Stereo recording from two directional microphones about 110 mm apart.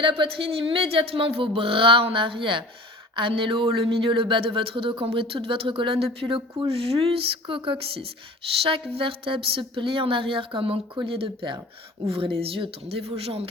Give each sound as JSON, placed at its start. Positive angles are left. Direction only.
{"t": 0.0, "sound": "speech", "side_deg": -50}